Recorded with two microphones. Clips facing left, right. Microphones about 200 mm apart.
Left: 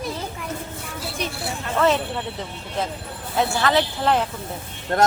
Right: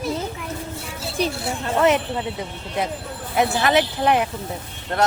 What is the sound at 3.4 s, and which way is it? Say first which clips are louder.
Speech: right 2 dB; 20° right (ahead or behind).